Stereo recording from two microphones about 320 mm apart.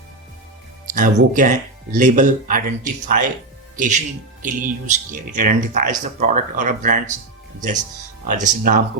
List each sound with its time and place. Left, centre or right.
0.9 s speech: right
8.3 s speech: right